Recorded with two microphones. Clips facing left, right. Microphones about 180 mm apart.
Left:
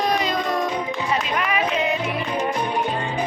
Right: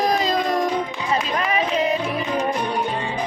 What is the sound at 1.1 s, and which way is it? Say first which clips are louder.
Music: right 3 dB; 30° right (ahead or behind).